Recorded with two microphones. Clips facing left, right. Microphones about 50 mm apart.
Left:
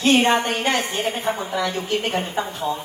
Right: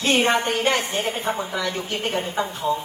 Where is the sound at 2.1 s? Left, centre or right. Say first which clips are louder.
Left 1 dB; left.